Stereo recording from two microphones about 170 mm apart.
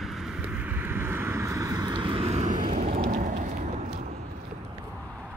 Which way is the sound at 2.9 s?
60° right (ahead or behind).